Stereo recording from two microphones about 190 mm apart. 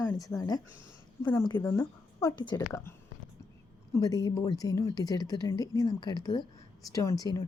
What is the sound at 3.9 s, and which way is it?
Speech, 20° left (ahead or behind).